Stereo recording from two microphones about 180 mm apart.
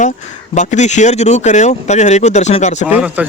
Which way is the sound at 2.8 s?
10° right (ahead or behind).